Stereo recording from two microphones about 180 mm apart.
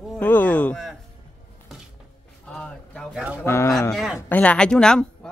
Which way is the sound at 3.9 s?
5° right (ahead or behind).